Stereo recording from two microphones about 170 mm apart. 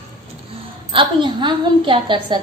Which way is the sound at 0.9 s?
30° right (ahead or behind).